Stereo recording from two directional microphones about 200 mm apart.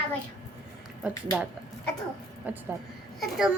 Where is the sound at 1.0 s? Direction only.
5° right (ahead or behind).